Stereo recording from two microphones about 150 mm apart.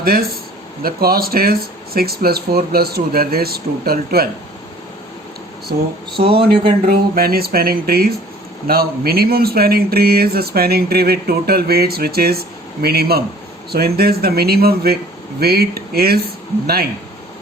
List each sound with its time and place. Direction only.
0.0 s speech: 85° right
5.7 s speech: 90° right
6.2 s speech: 35° right (ahead or behind)
6.8 s speech: 85° right
8.6 s speech: 90° right